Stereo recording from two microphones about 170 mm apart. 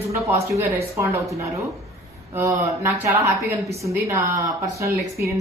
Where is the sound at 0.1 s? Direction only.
15° right (ahead or behind).